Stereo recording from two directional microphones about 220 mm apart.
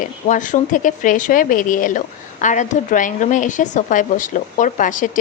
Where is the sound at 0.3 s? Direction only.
35° left (ahead or behind).